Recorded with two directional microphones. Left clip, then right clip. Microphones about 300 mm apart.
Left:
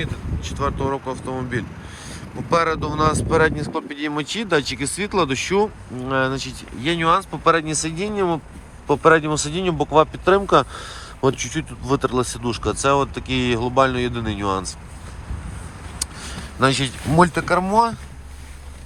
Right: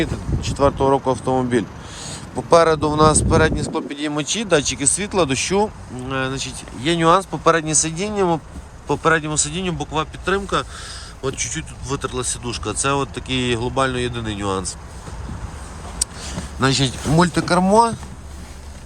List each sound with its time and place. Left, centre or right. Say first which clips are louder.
0.0 s speech: right 6 dB; right; by 5.6 s centre
6.1 s speech: left 3 dB; centre
6.9 s speech: right 3 dB; centre
16.6 s speech: even; centre